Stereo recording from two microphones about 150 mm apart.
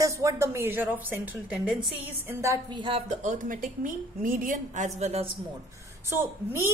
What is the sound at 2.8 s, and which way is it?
Speech, 35° right (ahead or behind).